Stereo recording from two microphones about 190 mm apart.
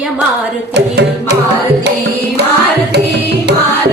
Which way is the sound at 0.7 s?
60° right (ahead or behind).